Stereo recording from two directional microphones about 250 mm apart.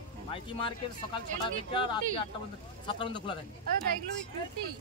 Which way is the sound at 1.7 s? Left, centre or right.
Centre.